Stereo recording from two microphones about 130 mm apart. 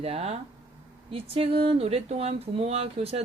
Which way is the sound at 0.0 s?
50° right (ahead or behind).